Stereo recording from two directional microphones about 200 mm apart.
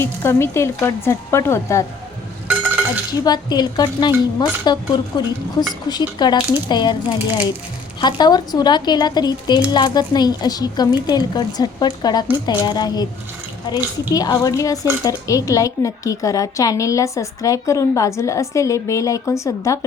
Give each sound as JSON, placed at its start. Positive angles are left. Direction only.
{"t": 0.0, "sound": "speech", "side_deg": 10}
{"t": 2.5, "sound": "a sound", "side_deg": -10}
{"t": 3.2, "sound": "speech", "side_deg": 20}
{"t": 14.1, "sound": "speech", "side_deg": 20}